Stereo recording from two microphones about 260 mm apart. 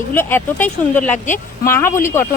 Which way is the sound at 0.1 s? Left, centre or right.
Centre.